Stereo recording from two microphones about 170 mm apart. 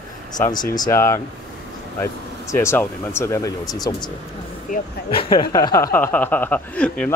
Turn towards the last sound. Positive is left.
turn(degrees=5)  # may be behind; listen again after turning